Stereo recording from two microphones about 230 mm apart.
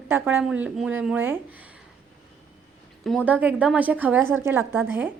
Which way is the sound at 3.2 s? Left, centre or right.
Centre.